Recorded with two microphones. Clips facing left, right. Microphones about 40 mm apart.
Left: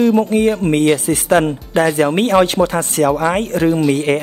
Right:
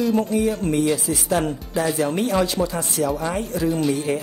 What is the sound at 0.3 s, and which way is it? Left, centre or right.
Speech, left.